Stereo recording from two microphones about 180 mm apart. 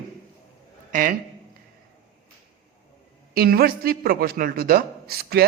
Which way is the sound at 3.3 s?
55° right (ahead or behind).